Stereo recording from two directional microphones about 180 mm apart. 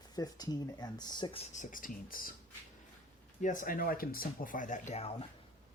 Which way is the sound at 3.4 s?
45° left (ahead or behind).